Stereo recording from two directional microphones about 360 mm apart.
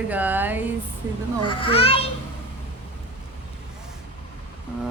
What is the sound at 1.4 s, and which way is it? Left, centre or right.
Speech, centre.